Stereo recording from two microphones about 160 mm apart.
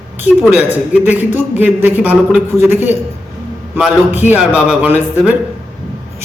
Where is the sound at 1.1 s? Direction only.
10° right (ahead or behind).